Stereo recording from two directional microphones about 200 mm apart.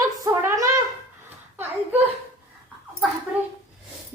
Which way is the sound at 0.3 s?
15° right (ahead or behind).